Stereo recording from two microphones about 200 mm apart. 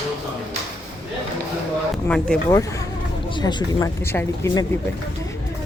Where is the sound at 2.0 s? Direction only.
5° left (ahead or behind).